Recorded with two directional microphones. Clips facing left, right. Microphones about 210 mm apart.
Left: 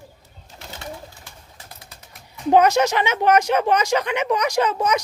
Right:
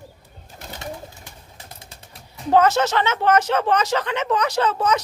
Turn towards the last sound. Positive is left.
turn(degrees=15)  # may be behind; listen again after turning